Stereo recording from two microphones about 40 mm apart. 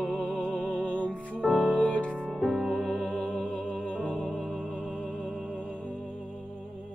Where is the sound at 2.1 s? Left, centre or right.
Left.